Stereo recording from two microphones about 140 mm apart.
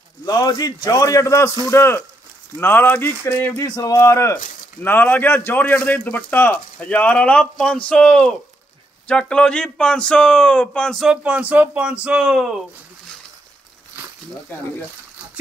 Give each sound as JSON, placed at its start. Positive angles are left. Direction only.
{"t": 0.2, "sound": "a man's voice", "side_deg": 25}